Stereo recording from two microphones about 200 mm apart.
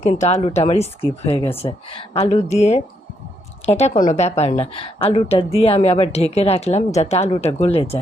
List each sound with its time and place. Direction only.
0.0 s a woman's voice: 35° left (ahead or behind)